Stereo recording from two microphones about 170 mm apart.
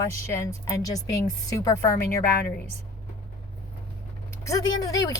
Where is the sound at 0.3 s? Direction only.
20° left (ahead or behind).